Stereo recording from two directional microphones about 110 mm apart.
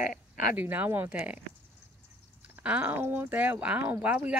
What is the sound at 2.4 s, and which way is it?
Speech, 10° right (ahead or behind).